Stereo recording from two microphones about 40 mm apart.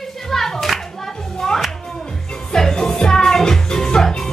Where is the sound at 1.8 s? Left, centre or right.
Centre.